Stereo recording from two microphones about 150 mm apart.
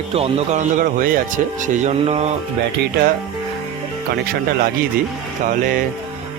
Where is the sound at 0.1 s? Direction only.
40° right (ahead or behind).